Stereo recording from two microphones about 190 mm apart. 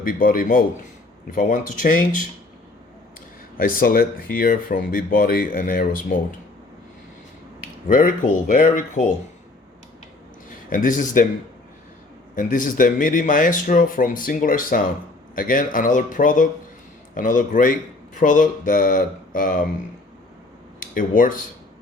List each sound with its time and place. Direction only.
0.2 s speech: 45° left (ahead or behind)
3.6 s speech: 50° left (ahead or behind)
7.9 s speech: 45° left (ahead or behind)
10.7 s speech: 45° left (ahead or behind)
12.3 s speech: 45° left (ahead or behind)
20.7 s speech: 45° left (ahead or behind)